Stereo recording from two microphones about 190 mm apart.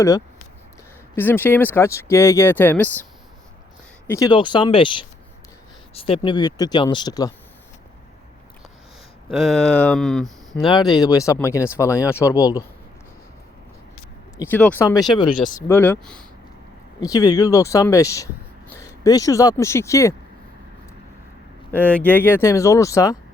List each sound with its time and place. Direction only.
1.1 s speech: 10° left (ahead or behind)
4.0 s speech: 15° left (ahead or behind)
9.3 s speech: centre (ahead or behind)
10.9 s speech: 20° left (ahead or behind)
14.3 s speech: 10° left (ahead or behind)
17.0 s speech: 20° left (ahead or behind)
21.8 s speech: 10° left (ahead or behind)